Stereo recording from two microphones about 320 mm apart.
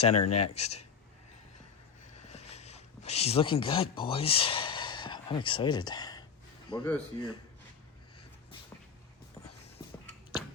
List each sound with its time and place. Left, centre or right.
0.2 s speech: left
0.5 s speech: centre
2.2 s a sound: centre
6.7 s speech: centre